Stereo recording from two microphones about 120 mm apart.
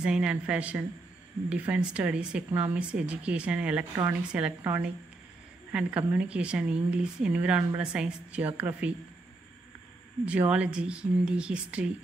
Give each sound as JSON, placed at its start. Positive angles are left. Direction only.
{"t": 0.0, "sound": "a woman's voice", "side_deg": -10}
{"t": 10.2, "sound": "a woman's voice", "side_deg": -10}